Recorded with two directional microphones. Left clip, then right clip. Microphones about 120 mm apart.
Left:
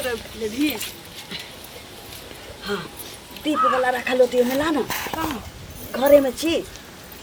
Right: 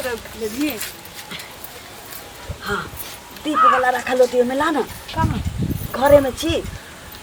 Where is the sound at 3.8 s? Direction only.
Centre (ahead or behind).